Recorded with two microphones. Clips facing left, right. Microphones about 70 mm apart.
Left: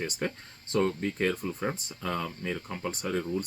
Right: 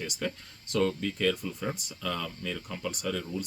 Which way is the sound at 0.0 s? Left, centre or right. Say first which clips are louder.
Left 2 dB; left.